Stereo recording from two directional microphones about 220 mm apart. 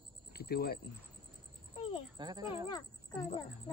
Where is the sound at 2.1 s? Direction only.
20° right (ahead or behind).